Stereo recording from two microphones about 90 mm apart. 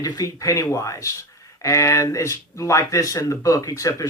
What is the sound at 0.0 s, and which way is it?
Speech, 40° left (ahead or behind).